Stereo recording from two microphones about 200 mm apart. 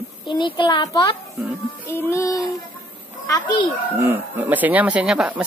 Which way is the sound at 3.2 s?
15° left (ahead or behind).